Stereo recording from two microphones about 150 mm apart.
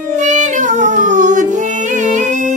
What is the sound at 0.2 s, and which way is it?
Music, 55° right (ahead or behind).